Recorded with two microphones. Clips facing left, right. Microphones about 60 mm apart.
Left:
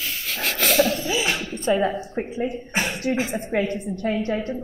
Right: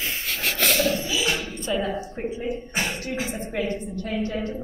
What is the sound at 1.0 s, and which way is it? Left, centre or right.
Music, left.